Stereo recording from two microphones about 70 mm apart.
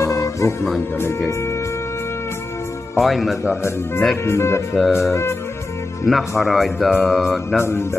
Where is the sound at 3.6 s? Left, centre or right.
Left.